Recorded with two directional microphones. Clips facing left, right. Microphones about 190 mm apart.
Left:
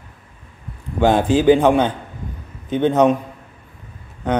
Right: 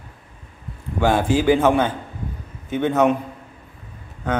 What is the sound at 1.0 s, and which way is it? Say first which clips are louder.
Speech: left 4 dB; 20° left (ahead or behind).